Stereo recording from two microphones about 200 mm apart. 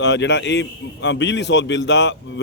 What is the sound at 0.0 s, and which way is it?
A man's voice, 60° left (ahead or behind).